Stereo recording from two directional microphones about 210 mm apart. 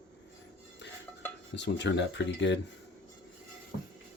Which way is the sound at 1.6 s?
55° left (ahead or behind).